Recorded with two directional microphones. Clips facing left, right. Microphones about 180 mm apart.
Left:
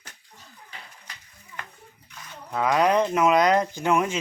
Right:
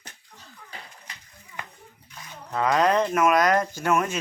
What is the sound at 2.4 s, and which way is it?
Speech, 5° left (ahead or behind).